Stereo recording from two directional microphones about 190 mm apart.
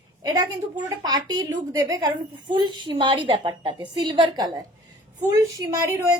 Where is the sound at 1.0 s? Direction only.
20° right (ahead or behind).